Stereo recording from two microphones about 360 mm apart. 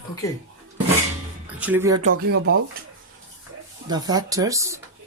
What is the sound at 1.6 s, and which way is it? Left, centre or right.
Speech, centre.